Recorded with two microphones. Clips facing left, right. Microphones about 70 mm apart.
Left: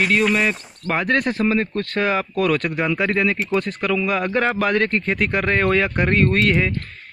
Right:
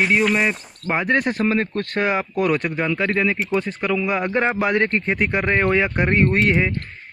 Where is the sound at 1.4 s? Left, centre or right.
Right; by 2.6 s centre.